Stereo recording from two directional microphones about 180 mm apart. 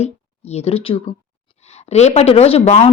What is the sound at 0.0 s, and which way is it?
Speech, 35° left (ahead or behind).